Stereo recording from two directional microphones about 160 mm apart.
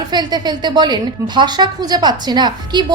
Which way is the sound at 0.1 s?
25° right (ahead or behind).